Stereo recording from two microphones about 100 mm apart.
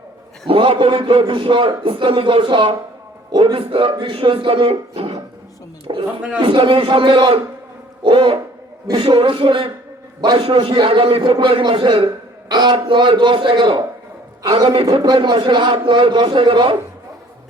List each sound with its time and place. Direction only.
0.4 s a man's voice: 65° right (ahead or behind)
3.4 s a man's voice: 70° right (ahead or behind)
5.9 s a man's voice: 55° right (ahead or behind)
10.4 s a man's voice: 65° right (ahead or behind)
12.0 s a sound: 45° right (ahead or behind)
12.7 s a man's voice: 55° right (ahead or behind)
15.0 s a man's voice: 45° right (ahead or behind)